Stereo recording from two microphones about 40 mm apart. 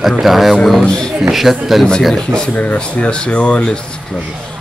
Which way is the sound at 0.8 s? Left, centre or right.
Left.